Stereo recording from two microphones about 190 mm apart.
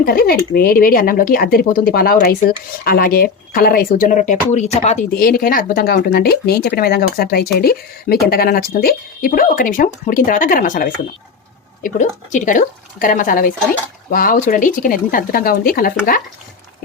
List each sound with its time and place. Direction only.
0.0 s speech: 50° left (ahead or behind); by 5.0 s 35° left (ahead or behind)
5.1 s speech: 50° left (ahead or behind)